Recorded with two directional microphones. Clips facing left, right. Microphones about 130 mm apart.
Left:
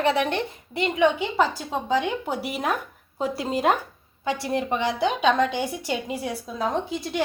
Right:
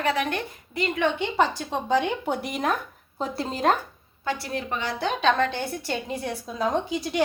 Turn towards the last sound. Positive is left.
turn(degrees=0)  # may be behind; listen again after turning